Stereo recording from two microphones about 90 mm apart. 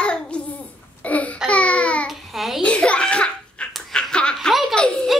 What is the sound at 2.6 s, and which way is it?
Laughter, 15° left (ahead or behind).